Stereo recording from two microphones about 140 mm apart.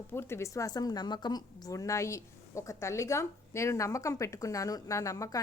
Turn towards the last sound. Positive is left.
turn(degrees=25)  # may be behind; listen again after turning